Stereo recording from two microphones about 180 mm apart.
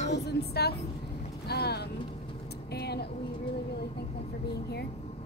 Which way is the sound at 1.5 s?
65° left (ahead or behind).